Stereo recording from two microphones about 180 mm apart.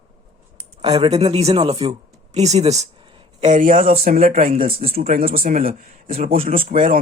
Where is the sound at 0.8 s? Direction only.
30° right (ahead or behind).